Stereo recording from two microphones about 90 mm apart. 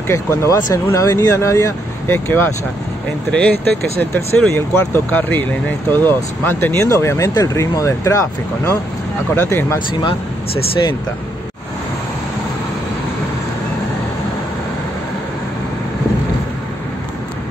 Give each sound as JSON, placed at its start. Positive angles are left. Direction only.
{"t": 0.1, "sound": "speech", "side_deg": 30}